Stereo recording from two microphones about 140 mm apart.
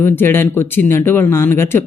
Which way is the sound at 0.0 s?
15° left (ahead or behind).